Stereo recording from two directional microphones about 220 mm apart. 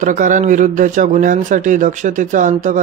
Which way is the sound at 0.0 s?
35° right (ahead or behind).